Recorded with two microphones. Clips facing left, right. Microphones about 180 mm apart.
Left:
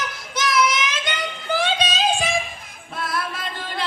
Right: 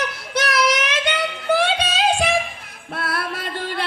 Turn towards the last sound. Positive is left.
turn(degrees=-60)  # may be behind; listen again after turning